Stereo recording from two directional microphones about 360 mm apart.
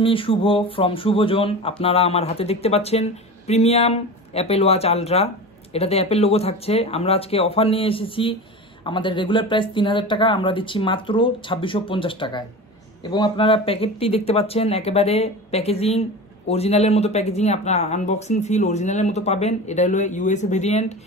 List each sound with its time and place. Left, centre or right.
0.0 s speech: centre